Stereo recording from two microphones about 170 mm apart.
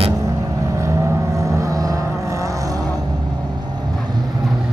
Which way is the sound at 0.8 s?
20° right (ahead or behind).